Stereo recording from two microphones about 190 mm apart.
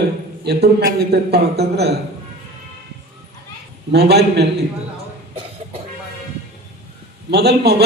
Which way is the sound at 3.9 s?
60° right (ahead or behind).